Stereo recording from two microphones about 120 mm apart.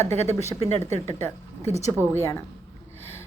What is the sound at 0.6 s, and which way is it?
Speech, 65° right (ahead or behind).